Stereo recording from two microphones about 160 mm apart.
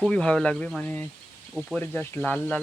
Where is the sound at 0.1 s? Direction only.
5° left (ahead or behind).